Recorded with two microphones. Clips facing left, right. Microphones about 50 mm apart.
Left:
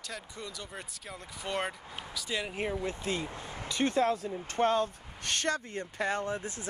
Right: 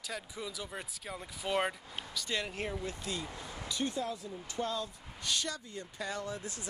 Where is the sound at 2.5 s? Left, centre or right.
Centre.